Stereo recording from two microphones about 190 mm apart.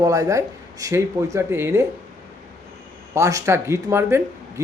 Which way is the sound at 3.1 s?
15° right (ahead or behind).